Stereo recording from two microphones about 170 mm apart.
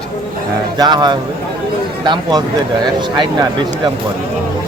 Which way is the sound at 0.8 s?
25° right (ahead or behind).